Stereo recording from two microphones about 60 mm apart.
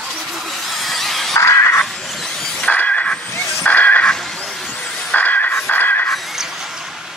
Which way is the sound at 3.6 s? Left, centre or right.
Left.